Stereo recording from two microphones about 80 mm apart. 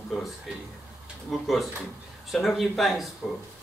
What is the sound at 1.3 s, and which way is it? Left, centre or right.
Speech, centre.